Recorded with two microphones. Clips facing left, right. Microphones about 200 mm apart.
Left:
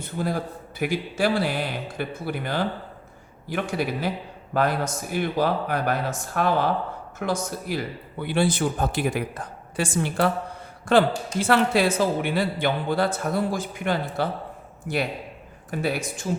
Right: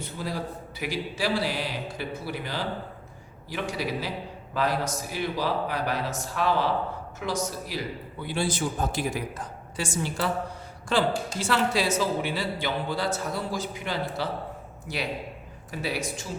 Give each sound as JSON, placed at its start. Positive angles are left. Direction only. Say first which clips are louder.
{"t": 0.0, "sound": "a man's voice", "louder": "left 5 dB", "side_deg": 50}
{"t": 8.2, "sound": "a man's voice", "louder": "left 6 dB", "side_deg": 60}